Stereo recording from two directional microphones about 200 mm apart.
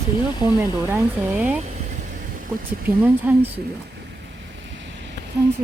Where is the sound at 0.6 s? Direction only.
10° right (ahead or behind).